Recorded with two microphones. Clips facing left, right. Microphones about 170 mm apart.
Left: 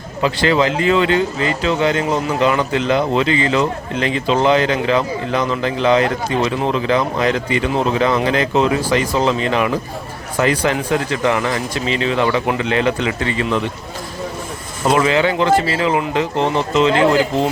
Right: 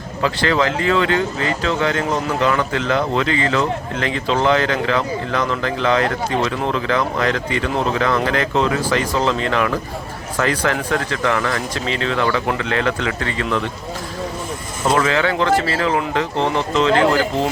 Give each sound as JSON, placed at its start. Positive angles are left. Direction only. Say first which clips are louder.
{"t": 0.2, "sound": "speech", "louder": "left 3 dB", "side_deg": 15}
{"t": 14.8, "sound": "speech", "louder": "left 2 dB", "side_deg": 15}